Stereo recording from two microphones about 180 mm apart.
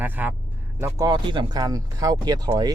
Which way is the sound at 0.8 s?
20° right (ahead or behind).